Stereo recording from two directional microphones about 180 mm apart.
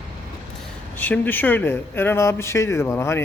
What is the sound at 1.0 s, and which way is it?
Speech, 10° left (ahead or behind).